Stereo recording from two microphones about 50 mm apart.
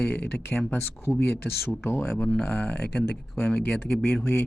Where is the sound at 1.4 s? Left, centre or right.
Left.